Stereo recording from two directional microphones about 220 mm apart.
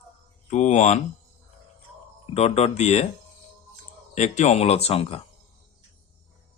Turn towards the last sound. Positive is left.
turn(degrees=25)  # may be behind; listen again after turning